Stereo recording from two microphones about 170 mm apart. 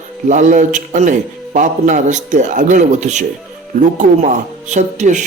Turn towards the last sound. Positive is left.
turn(degrees=-45)  # may be behind; listen again after turning